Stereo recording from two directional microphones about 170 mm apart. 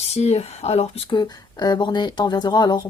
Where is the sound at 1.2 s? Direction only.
25° left (ahead or behind).